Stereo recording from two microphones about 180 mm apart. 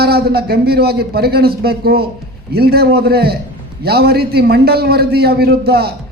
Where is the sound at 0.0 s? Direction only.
60° right (ahead or behind).